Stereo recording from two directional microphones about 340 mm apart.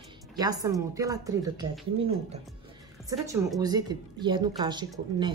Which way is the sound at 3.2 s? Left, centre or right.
Centre.